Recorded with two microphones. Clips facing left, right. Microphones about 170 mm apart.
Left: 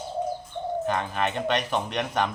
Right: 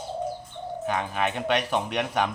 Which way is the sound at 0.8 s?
5° right (ahead or behind).